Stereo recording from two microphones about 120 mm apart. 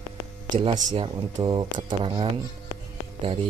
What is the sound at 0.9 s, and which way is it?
Speech, 40° right (ahead or behind).